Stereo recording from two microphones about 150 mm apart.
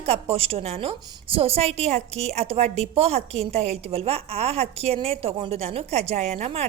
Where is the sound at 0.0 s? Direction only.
40° right (ahead or behind).